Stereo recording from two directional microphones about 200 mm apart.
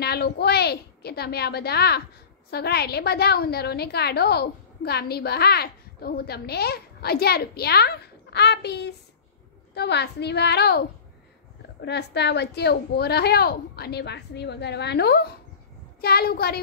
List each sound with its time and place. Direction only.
0.0 s a woman's voice: 55° left (ahead or behind)
11.8 s a woman's voice: 55° left (ahead or behind)